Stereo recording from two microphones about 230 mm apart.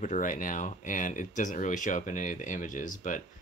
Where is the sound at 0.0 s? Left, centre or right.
Left.